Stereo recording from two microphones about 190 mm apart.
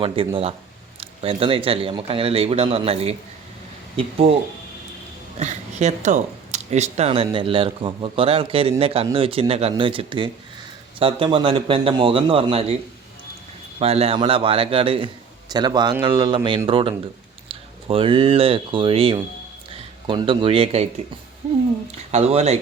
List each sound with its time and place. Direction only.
0.2 s speech: 30° right (ahead or behind)
5.4 s speech: 40° right (ahead or behind)
13.7 s speech: 30° right (ahead or behind)
22.1 s speech: 35° right (ahead or behind)